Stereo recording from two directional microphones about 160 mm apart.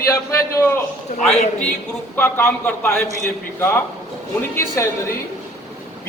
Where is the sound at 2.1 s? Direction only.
15° left (ahead or behind).